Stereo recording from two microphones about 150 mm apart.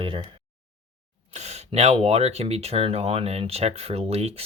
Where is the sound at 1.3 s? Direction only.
45° right (ahead or behind).